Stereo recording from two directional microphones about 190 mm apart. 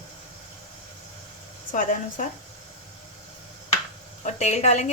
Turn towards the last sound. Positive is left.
turn(degrees=35)  # may be behind; listen again after turning